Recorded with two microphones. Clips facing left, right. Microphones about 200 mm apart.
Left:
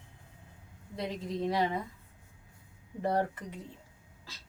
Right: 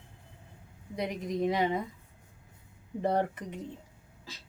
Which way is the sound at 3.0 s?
20° right (ahead or behind).